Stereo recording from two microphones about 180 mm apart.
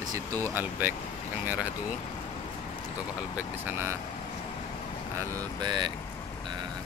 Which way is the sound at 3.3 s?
10° right (ahead or behind).